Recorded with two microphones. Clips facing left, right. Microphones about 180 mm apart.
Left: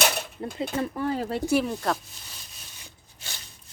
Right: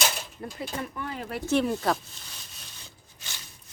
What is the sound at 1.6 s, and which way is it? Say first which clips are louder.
Speech: right 1 dB; centre (ahead or behind).